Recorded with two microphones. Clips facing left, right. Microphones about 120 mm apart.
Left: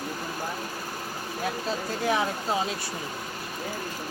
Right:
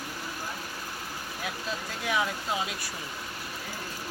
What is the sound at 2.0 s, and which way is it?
Speech, 35° left (ahead or behind).